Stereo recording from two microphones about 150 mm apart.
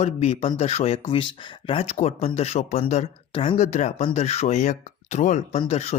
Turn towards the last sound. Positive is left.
turn(degrees=45)  # may be behind; listen again after turning